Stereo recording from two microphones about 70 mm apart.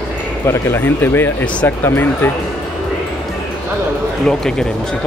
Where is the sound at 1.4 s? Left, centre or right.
Centre.